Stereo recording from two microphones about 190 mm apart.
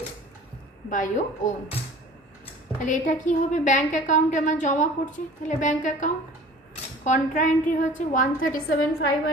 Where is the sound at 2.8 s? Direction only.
40° left (ahead or behind).